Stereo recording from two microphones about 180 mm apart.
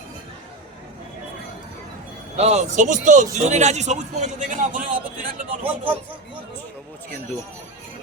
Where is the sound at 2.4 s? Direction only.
40° right (ahead or behind).